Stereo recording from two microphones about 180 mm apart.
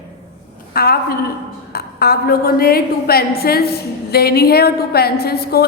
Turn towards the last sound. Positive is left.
turn(degrees=60)  # may be behind; listen again after turning